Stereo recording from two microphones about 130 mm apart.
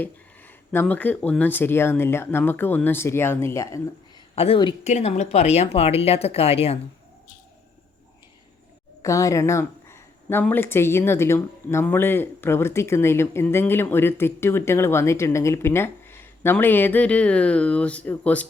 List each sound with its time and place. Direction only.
0.0 s speech: 15° left (ahead or behind)
4.4 s speech: 45° left (ahead or behind)
4.8 s speech: 60° left (ahead or behind)
9.0 s a sound: 25° left (ahead or behind)
10.4 s speech: 15° left (ahead or behind)